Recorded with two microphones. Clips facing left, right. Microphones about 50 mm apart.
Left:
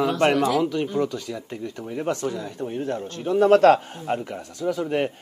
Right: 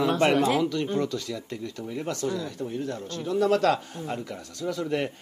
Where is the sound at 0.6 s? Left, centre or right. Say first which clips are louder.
Left 3 dB; centre.